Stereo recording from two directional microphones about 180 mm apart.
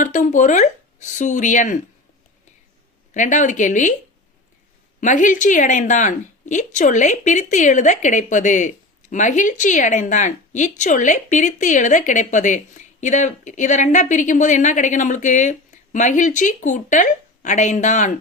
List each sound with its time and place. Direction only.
0.0 s speech: 40° left (ahead or behind)
3.2 s speech: 45° left (ahead or behind)
4.9 s speech: 45° left (ahead or behind)